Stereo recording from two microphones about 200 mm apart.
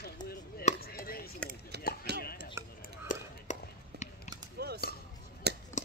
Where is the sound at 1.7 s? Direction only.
55° right (ahead or behind).